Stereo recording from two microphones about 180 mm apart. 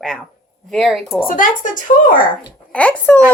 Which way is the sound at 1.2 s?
50° left (ahead or behind).